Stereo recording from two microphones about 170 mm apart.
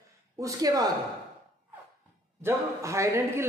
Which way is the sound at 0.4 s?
20° right (ahead or behind).